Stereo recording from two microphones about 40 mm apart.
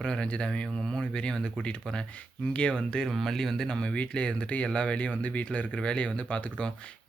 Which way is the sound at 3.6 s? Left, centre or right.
Left.